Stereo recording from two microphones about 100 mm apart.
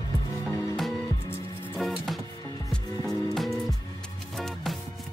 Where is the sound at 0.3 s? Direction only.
35° left (ahead or behind).